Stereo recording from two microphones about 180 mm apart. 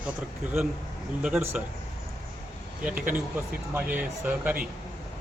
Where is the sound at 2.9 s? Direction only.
50° right (ahead or behind).